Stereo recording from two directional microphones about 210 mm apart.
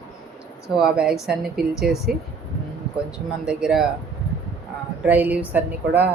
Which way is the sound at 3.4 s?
5° right (ahead or behind).